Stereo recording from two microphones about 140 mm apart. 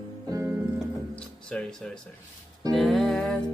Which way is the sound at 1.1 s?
5° left (ahead or behind).